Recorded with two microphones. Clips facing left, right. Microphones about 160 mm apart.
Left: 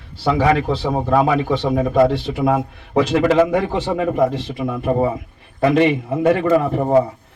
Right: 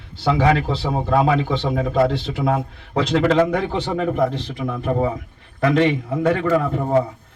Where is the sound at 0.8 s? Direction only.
10° left (ahead or behind).